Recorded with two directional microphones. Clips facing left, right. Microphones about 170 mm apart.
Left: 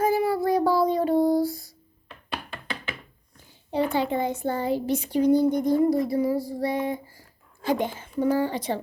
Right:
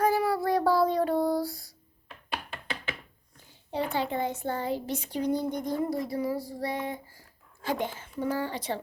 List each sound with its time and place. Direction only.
0.2 s child singing: 25° left (ahead or behind)
0.6 s child singing: centre (ahead or behind)
1.1 s a sound: centre (ahead or behind)
3.7 s speech: 15° left (ahead or behind)